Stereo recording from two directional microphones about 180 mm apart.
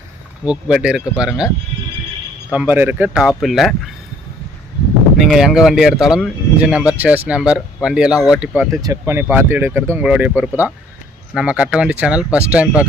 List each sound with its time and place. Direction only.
0.4 s speech: 5° right (ahead or behind)
2.5 s speech: 10° right (ahead or behind)
5.2 s speech: centre (ahead or behind)
8.7 s speech: 20° right (ahead or behind)